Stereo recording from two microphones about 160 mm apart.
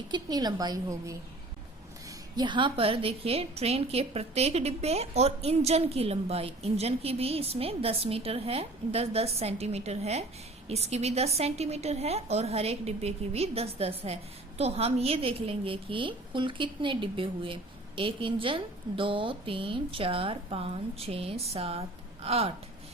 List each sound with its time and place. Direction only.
0.1 s a woman's voice: 25° right (ahead or behind)